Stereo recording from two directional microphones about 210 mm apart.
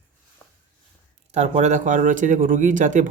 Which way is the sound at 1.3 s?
30° right (ahead or behind).